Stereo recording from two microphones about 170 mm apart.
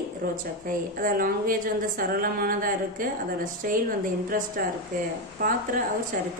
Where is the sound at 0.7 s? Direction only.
55° right (ahead or behind).